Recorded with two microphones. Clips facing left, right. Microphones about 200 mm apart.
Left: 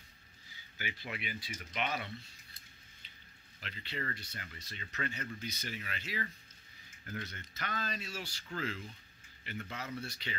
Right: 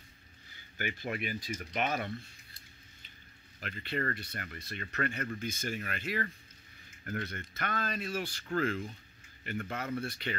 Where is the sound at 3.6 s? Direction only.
50° right (ahead or behind).